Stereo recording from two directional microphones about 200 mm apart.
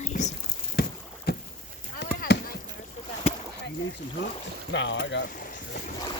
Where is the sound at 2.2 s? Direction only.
45° left (ahead or behind).